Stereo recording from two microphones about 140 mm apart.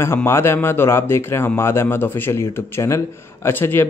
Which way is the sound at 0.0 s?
20° left (ahead or behind).